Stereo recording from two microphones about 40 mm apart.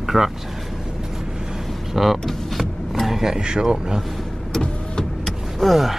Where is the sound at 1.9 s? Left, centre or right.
Centre.